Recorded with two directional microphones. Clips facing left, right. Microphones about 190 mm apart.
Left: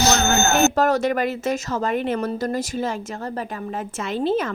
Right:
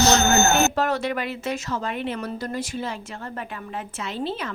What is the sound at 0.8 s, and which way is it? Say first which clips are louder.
Speech: left 5 dB; 45° left (ahead or behind).